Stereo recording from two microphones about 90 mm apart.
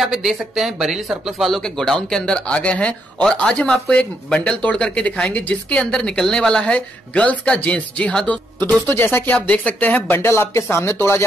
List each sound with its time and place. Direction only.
0.0 s speech: 5° right (ahead or behind); by 8.4 s 10° left (ahead or behind)
8.8 s speech: 25° left (ahead or behind)